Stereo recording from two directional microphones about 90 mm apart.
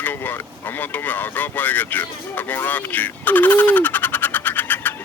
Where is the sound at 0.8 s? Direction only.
20° left (ahead or behind).